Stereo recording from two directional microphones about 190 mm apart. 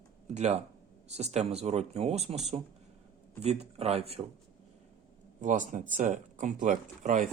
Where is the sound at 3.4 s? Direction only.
35° right (ahead or behind).